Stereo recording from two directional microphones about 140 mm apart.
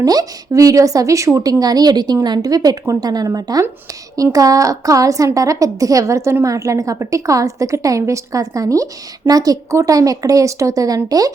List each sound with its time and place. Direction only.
0.0 s a woman's voice: 25° right (ahead or behind)